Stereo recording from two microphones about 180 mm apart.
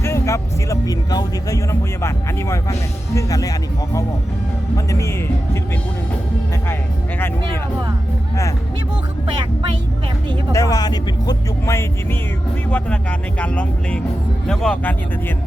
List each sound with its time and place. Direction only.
0.0 s speech: 15° left (ahead or behind)
4.9 s speech: 15° left (ahead or behind)
10.5 s speech: 20° left (ahead or behind)